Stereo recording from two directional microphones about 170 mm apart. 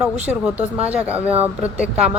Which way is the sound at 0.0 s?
10° right (ahead or behind).